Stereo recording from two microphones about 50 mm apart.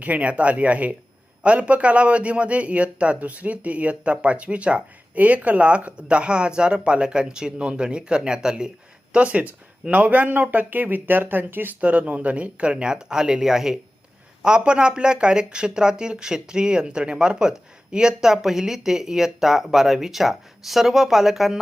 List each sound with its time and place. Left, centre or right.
0.0 s a man's voice: right
11.8 s a man's voice: right; by 21.6 s centre